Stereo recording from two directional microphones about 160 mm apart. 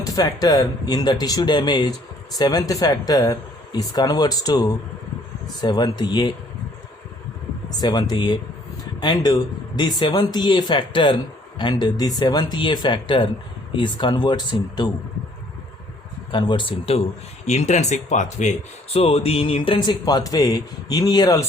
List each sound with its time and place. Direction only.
0.0 s a man's voice: 25° left (ahead or behind)
7.8 s a man's voice: 25° left (ahead or behind)
16.3 s speech: 30° left (ahead or behind); by 18.5 s 50° left (ahead or behind)
18.9 s a man's voice: 35° left (ahead or behind)